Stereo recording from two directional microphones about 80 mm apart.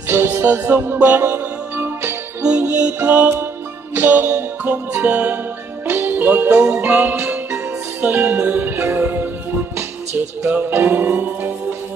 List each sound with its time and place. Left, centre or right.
0.1 s music: right